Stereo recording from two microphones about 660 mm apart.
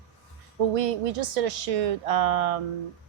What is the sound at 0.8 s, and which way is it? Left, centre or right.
A woman's voice, right.